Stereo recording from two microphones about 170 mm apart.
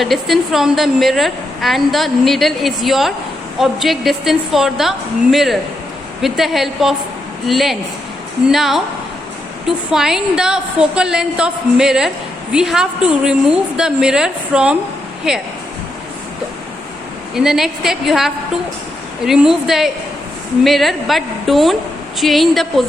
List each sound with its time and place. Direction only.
0.0 s a woman's voice: centre (ahead or behind)
9.9 s a woman's voice: 5° right (ahead or behind)
17.3 s a woman's voice: 5° right (ahead or behind)